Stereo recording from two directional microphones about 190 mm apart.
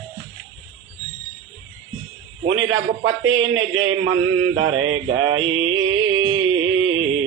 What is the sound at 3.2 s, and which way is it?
Mantra, 90° right.